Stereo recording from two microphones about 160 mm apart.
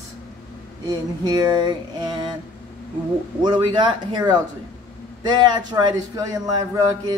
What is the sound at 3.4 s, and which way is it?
Speech, 30° right (ahead or behind).